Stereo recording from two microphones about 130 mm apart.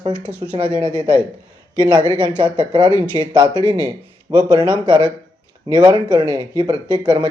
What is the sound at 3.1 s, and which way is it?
Speech, 35° right (ahead or behind).